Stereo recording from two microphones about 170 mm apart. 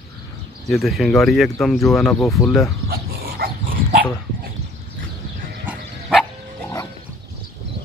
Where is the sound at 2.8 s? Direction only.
65° right (ahead or behind).